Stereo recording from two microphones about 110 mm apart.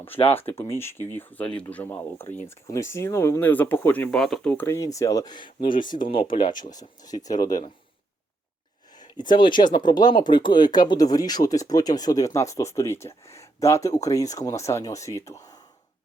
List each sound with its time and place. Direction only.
0.2 s speech: 60° left (ahead or behind)
0.4 s speech: 25° left (ahead or behind)
4.1 s speech: 5° left (ahead or behind)
4.4 s speech: 20° left (ahead or behind); by 7.6 s 35° left (ahead or behind)
9.0 s speech: 40° left (ahead or behind)